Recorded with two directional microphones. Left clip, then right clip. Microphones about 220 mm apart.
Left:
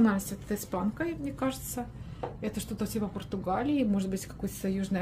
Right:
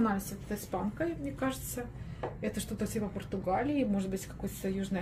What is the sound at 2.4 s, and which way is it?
A woman's voice, 30° left (ahead or behind).